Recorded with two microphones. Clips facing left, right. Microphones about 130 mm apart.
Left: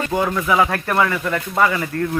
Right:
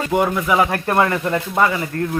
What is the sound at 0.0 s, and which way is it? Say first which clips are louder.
Speech: right 2 dB; 15° right (ahead or behind).